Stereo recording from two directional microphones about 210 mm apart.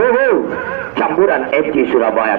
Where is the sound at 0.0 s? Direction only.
40° left (ahead or behind).